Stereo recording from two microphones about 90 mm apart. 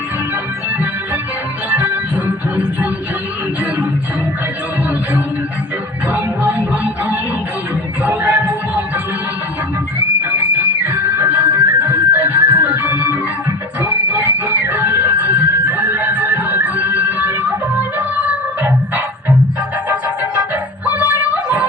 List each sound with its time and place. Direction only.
1.7 s music: 20° right (ahead or behind)
6.1 s music: 15° right (ahead or behind)
10.8 s music: 25° right (ahead or behind)
20.8 s female singing: 20° right (ahead or behind)